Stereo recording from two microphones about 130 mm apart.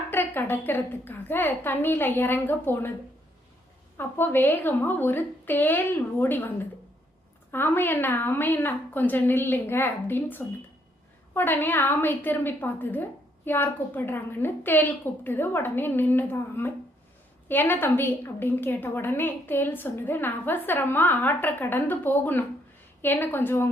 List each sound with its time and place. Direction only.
0.1 s a woman's voice: 15° left (ahead or behind)
3.9 s a woman's voice: 15° left (ahead or behind)